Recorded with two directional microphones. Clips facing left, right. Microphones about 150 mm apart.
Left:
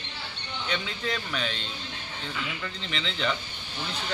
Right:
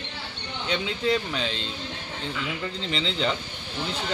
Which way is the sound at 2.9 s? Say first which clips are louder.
Right 3 dB; 30° right (ahead or behind).